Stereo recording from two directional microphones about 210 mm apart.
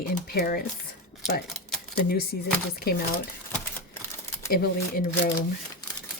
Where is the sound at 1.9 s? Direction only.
45° left (ahead or behind).